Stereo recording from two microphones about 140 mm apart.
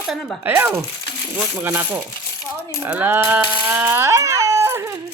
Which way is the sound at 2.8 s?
15° right (ahead or behind).